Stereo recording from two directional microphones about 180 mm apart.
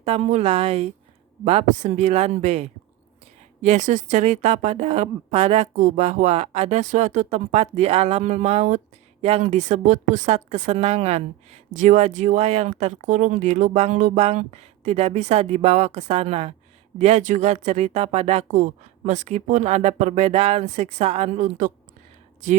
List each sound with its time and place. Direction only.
0.0 s speech: 35° right (ahead or behind)